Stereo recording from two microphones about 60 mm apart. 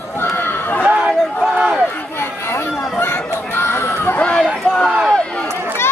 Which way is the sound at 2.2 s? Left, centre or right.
Left.